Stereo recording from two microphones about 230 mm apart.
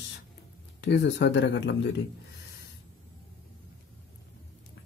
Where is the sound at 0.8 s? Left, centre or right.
Left.